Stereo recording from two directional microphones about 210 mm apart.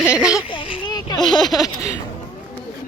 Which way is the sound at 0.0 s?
5° right (ahead or behind).